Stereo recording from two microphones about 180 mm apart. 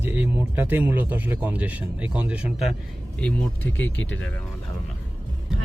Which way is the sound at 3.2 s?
10° left (ahead or behind).